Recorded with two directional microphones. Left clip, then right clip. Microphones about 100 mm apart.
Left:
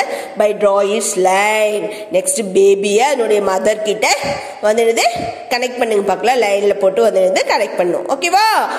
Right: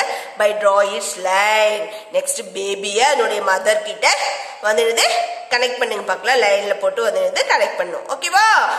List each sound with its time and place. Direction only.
0.0 s speech: 30° left (ahead or behind)